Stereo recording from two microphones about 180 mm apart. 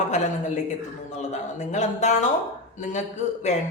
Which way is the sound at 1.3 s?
40° left (ahead or behind).